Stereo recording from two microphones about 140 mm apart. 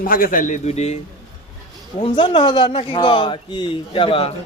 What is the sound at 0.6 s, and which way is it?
Speech, 50° left (ahead or behind).